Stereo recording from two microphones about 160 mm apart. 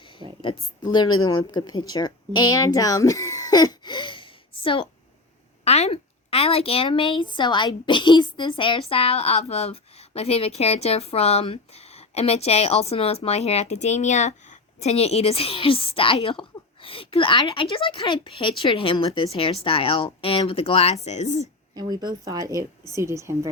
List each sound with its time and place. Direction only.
0.4 s a woman's voice: 30° left (ahead or behind); by 21.4 s 45° left (ahead or behind)
21.4 s a woman's voice: 25° right (ahead or behind)